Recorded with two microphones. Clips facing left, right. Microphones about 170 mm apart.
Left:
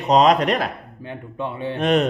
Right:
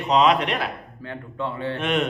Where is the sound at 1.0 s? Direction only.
20° left (ahead or behind).